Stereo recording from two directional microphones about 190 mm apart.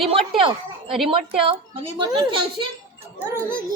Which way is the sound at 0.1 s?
30° right (ahead or behind).